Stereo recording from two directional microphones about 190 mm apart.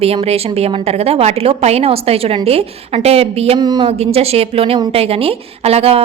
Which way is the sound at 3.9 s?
30° right (ahead or behind).